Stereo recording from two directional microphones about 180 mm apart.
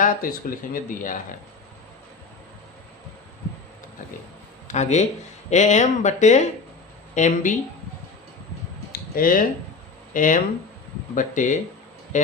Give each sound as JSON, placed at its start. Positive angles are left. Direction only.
{"t": 0.0, "sound": "speech", "side_deg": 50}
{"t": 4.7, "sound": "speech", "side_deg": 40}
{"t": 8.9, "sound": "a sound", "side_deg": 50}
{"t": 10.2, "sound": "speech", "side_deg": 45}